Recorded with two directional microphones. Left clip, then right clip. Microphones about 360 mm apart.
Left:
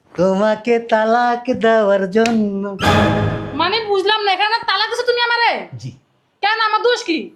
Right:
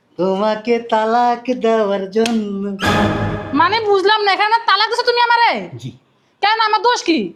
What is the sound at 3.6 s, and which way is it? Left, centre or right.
A woman's voice, right.